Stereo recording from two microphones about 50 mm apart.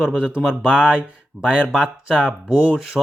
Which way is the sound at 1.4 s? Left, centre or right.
Centre.